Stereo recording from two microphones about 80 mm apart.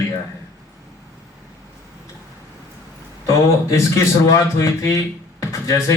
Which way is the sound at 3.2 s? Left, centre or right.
Left.